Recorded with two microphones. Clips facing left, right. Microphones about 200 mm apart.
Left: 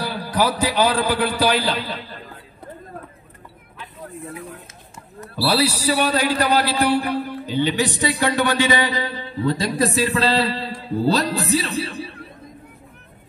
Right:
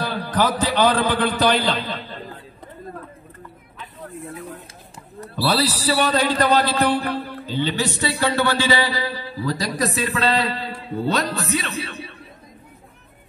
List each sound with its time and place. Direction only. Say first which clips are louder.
0.0 s a man's voice: even; 10° left (ahead or behind)
5.3 s a man's voice: left 1 dB; 10° left (ahead or behind); by 12.1 s 30° left (ahead or behind)